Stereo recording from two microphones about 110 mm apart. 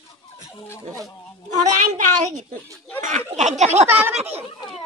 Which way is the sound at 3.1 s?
90° right.